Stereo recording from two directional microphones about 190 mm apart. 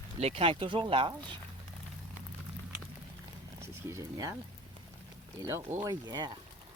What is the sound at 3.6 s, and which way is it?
Speech, 15° right (ahead or behind).